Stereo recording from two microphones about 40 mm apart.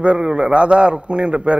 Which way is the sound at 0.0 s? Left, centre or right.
Right.